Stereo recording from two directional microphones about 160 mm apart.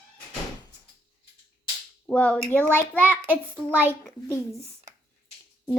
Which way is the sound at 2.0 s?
5° left (ahead or behind).